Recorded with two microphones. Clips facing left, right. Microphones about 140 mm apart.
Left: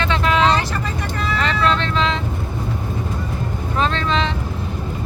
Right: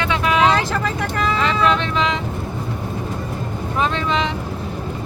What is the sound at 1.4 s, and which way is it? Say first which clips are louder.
Vehicle: even; 15° right (ahead or behind).